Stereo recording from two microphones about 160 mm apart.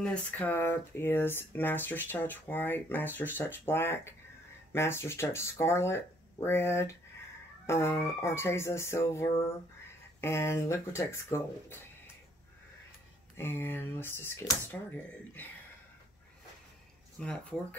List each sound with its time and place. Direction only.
0.0 s speech: 10° left (ahead or behind)
13.4 s speech: 15° left (ahead or behind)
17.2 s speech: 5° left (ahead or behind)